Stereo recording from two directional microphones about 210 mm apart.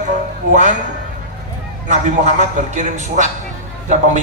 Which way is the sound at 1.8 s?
35° right (ahead or behind).